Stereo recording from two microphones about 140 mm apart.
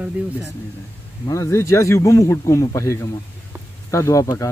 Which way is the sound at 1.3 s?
20° left (ahead or behind).